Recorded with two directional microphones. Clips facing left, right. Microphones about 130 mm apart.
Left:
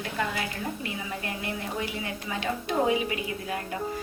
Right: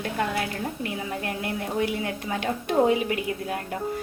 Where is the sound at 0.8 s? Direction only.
60° right (ahead or behind).